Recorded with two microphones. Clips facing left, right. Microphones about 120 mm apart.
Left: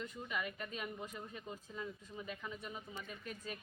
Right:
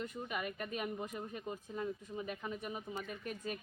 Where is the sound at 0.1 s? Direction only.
50° right (ahead or behind).